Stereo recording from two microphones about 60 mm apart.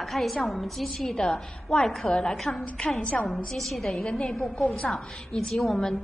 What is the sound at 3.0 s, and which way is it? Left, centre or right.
Speech, centre.